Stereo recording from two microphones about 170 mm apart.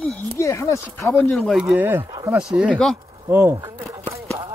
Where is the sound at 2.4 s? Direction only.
5° right (ahead or behind).